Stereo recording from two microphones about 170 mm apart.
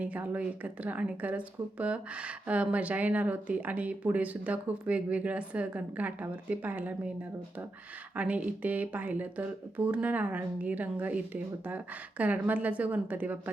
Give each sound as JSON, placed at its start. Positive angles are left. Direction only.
{"t": 0.0, "sound": "speech", "side_deg": -10}
{"t": 8.1, "sound": "speech", "side_deg": -10}